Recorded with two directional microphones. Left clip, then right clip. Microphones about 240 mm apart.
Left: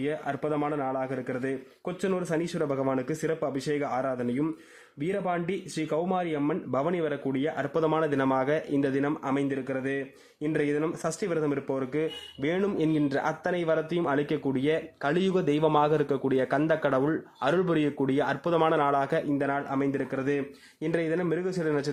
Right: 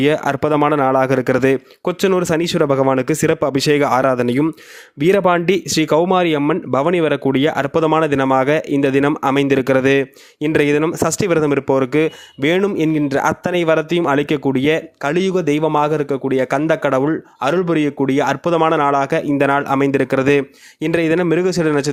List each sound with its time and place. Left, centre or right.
0.0 s speech: right